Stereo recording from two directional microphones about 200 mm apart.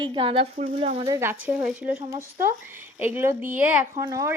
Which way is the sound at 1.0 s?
15° right (ahead or behind).